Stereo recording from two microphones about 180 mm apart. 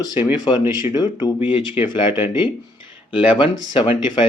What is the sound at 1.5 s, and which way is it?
Speech, 30° left (ahead or behind).